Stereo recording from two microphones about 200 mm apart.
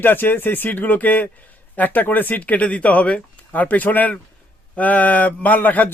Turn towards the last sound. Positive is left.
turn(degrees=10)  # may be behind; listen again after turning